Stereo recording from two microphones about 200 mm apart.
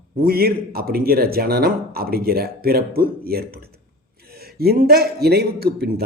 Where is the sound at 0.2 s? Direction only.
50° right (ahead or behind).